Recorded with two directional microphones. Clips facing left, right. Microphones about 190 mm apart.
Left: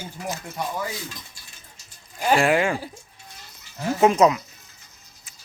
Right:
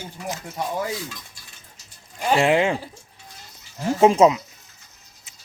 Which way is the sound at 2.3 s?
20° right (ahead or behind).